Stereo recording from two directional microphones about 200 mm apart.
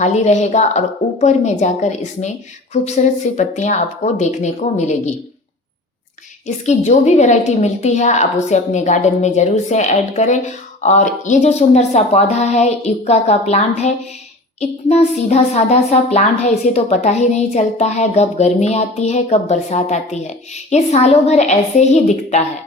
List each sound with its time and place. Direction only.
0.0 s a woman's voice: 35° left (ahead or behind)
6.7 s a woman's voice: 35° left (ahead or behind)